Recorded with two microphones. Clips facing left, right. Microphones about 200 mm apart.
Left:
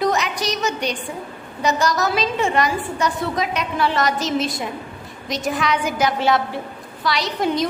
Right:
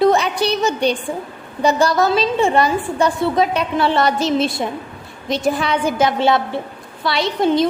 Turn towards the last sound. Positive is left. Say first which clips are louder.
# right 5 dB
turn(degrees=-25)  # may be behind; listen again after turning